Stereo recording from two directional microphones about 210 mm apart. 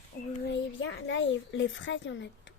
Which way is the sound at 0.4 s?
60° left (ahead or behind).